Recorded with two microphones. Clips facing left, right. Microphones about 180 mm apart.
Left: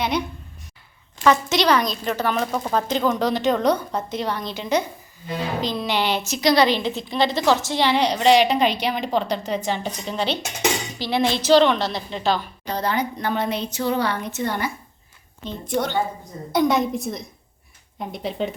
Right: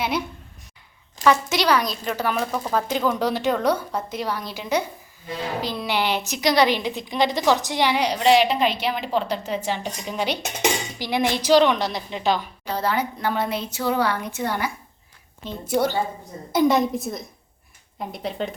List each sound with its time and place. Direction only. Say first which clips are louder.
1.2 s a woman's voice: left 1 dB; 10° right (ahead or behind)
12.6 s a woman's voice: even; 5° right (ahead or behind)